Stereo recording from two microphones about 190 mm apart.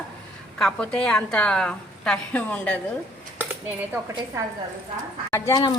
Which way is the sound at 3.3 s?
10° right (ahead or behind).